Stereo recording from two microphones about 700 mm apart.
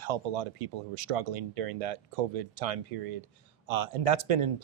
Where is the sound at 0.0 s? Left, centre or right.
Right.